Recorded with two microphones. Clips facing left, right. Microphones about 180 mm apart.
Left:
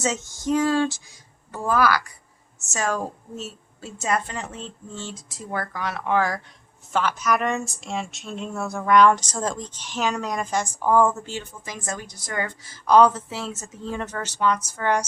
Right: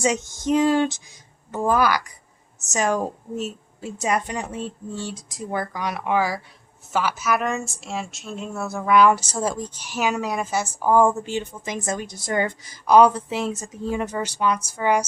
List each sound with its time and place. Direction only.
0.0 s speech: 15° right (ahead or behind)